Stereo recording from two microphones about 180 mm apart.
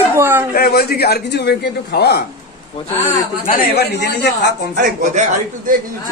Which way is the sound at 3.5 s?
55° left (ahead or behind).